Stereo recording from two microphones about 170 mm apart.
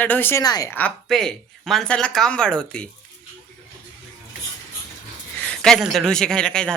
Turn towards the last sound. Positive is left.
turn(degrees=5)  # may be behind; listen again after turning